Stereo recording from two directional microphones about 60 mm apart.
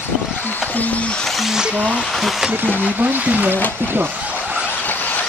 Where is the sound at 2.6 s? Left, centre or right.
Right.